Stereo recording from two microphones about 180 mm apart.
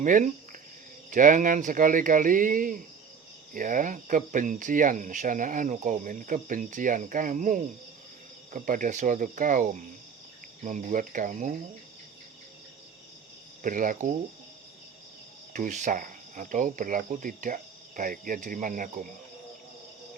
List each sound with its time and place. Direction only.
0.0 s speech: 45° right (ahead or behind)
13.6 s speech: 50° right (ahead or behind)
15.5 s speech: 45° right (ahead or behind)